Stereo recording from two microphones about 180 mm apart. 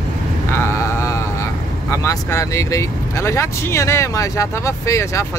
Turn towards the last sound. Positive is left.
turn(degrees=15)  # may be behind; listen again after turning